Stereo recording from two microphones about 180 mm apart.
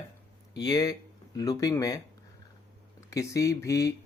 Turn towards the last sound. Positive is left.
turn(degrees=15)  # may be behind; listen again after turning